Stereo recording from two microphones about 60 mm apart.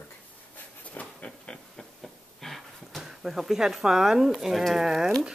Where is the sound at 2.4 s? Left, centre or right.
Centre.